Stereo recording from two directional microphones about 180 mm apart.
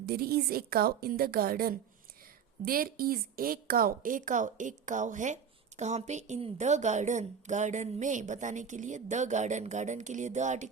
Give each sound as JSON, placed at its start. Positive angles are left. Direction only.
{"t": 0.0, "sound": "a woman's voice", "side_deg": -60}